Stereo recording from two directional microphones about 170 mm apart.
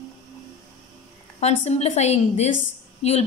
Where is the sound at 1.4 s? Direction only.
40° left (ahead or behind).